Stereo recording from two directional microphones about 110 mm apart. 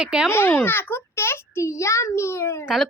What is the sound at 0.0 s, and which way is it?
Speech, 10° right (ahead or behind).